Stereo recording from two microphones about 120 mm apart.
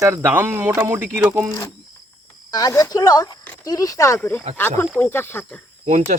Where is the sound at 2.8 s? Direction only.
30° left (ahead or behind).